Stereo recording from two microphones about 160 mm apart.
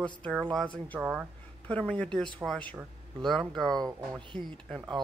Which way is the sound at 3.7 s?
25° right (ahead or behind).